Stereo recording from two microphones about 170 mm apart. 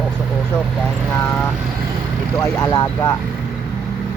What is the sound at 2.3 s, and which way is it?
Speech, 20° left (ahead or behind).